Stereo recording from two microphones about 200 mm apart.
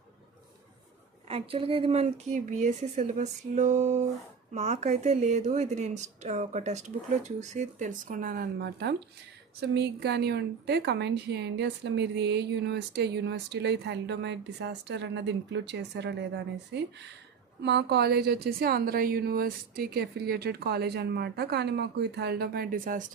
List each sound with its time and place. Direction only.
1.3 s a woman's voice: 25° right (ahead or behind); by 23.0 s 45° right (ahead or behind)